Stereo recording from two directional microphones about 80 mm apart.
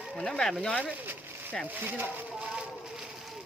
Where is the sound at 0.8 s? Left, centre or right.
Right.